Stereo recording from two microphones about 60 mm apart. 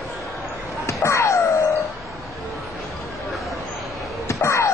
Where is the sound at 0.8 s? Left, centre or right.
Left.